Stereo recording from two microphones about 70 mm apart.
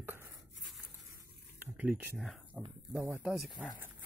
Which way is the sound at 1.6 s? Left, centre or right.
Right.